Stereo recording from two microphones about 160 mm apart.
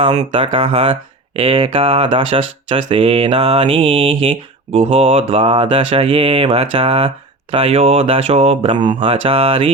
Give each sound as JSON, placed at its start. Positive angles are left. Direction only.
{"t": 0.3, "sound": "speech", "side_deg": -30}